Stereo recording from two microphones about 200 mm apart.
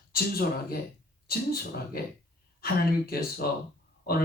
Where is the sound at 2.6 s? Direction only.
50° left (ahead or behind).